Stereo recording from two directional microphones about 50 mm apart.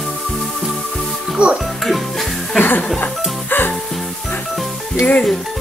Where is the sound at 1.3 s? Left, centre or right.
Right.